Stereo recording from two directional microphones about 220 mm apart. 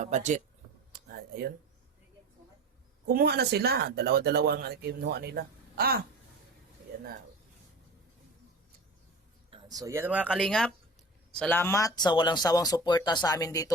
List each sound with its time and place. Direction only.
0.0 s speech: 35° right (ahead or behind)
0.9 s a sound: 45° right (ahead or behind)
3.1 s speech: 45° right (ahead or behind)
9.5 s speech: 15° right (ahead or behind); by 13.7 s 15° left (ahead or behind)